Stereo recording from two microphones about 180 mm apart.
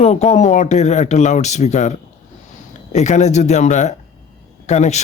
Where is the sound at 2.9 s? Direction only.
40° left (ahead or behind).